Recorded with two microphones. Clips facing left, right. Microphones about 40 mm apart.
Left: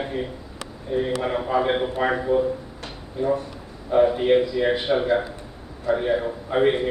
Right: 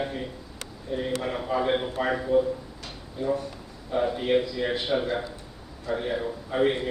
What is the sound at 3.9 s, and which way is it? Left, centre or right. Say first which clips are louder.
A man's voice: left 7 dB; left.